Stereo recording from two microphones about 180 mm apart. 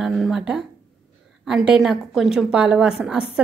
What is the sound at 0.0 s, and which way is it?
A woman's voice, centre (ahead or behind).